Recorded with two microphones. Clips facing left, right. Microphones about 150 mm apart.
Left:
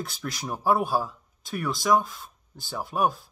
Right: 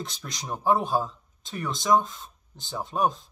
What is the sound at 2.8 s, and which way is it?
Speech, 10° left (ahead or behind).